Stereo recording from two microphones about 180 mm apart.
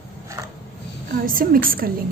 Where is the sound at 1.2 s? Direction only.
50° right (ahead or behind).